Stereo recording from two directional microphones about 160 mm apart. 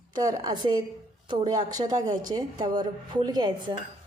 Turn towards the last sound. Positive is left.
turn(degrees=-25)  # may be behind; listen again after turning